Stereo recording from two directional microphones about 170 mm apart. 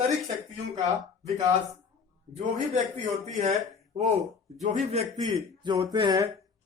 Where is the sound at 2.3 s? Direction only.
45° right (ahead or behind).